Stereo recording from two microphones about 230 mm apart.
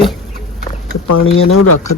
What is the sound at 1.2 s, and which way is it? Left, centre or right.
Speech, left.